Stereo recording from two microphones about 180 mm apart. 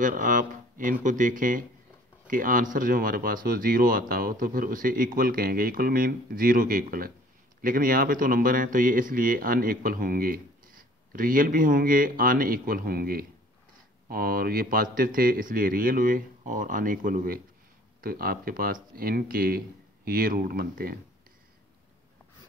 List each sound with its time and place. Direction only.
0.0 s speech: 50° right (ahead or behind)